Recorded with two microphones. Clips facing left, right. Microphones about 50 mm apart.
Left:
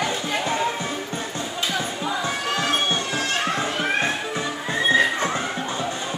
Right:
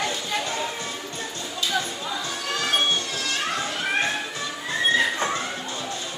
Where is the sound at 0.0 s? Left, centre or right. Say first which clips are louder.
Left 3 dB; left.